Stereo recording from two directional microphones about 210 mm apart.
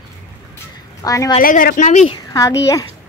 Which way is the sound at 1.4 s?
40° left (ahead or behind).